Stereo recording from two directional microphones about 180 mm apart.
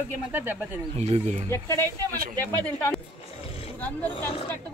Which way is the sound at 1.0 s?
40° right (ahead or behind).